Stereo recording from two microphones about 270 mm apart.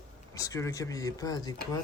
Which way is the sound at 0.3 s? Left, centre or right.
Centre.